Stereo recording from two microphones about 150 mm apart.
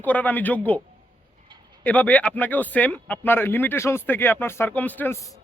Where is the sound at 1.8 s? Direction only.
10° left (ahead or behind).